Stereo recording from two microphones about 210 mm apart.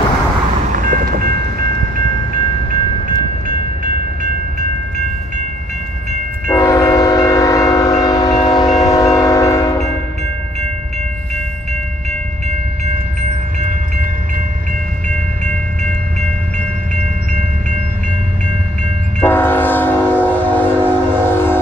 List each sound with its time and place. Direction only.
0.7 s train: 40° right (ahead or behind)
6.5 s train: 15° left (ahead or behind)
15.0 s train: 35° right (ahead or behind)
19.1 s train: 10° left (ahead or behind)